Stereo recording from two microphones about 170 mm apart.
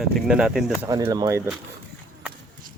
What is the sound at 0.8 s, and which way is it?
Speech, 20° right (ahead or behind).